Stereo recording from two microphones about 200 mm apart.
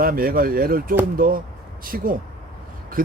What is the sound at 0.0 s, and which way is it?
Speech, 45° right (ahead or behind).